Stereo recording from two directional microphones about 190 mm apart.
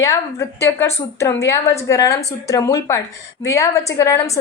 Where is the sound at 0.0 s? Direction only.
15° left (ahead or behind).